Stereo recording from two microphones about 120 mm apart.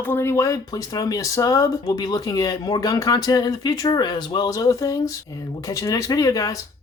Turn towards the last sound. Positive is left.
turn(degrees=30)  # may be behind; listen again after turning